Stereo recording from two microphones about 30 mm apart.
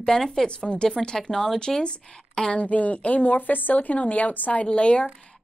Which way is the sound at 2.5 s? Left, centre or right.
Left.